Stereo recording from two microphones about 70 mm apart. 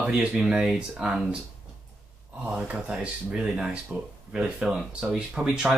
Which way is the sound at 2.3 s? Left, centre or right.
Centre.